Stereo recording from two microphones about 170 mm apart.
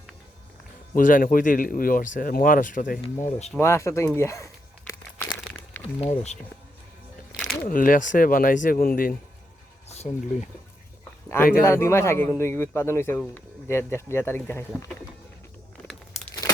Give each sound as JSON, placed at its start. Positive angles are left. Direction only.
{"t": 0.9, "sound": "speech", "side_deg": 55}
{"t": 3.2, "sound": "speech", "side_deg": 40}
{"t": 3.6, "sound": "a man's voice", "side_deg": 15}
{"t": 5.2, "sound": "crumpling", "side_deg": 10}
{"t": 6.0, "sound": "speech", "side_deg": 40}
{"t": 7.6, "sound": "speech", "side_deg": 55}
{"t": 9.9, "sound": "speech", "side_deg": 40}
{"t": 11.6, "sound": "a man's voice", "side_deg": 15}